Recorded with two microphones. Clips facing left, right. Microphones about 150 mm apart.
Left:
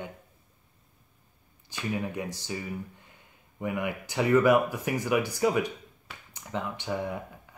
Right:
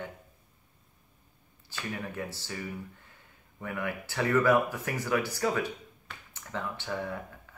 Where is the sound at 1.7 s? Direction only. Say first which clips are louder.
Left 5 dB; 15° left (ahead or behind).